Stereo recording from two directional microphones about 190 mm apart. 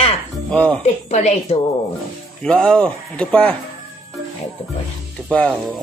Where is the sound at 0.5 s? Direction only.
5° left (ahead or behind).